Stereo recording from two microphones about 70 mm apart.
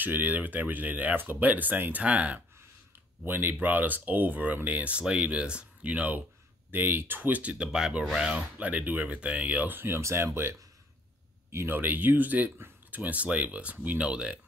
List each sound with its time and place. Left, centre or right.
0.0 s speech: right
3.3 s speech: right
11.5 s speech: right; by 14.4 s centre